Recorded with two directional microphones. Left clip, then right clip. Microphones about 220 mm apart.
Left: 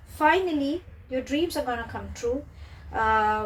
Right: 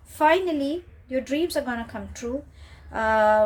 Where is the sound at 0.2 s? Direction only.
50° right (ahead or behind).